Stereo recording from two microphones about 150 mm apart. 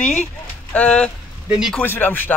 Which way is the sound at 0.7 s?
10° left (ahead or behind).